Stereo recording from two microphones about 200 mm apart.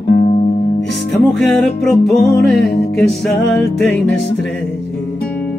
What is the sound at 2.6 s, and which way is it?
Music, 55° left (ahead or behind).